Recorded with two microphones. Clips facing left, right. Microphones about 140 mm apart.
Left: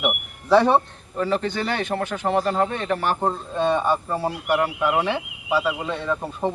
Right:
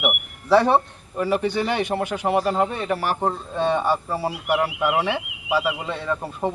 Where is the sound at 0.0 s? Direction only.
5° right (ahead or behind).